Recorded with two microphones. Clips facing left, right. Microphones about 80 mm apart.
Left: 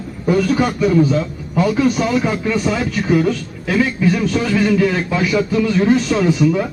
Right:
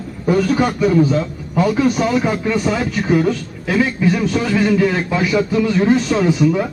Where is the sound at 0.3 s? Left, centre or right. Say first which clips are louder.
Even; right.